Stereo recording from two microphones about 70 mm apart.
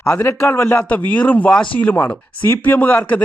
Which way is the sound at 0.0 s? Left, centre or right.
Left.